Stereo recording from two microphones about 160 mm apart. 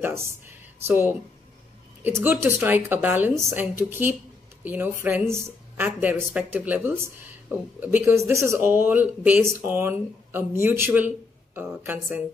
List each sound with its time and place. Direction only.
0.0 s speech: 15° right (ahead or behind)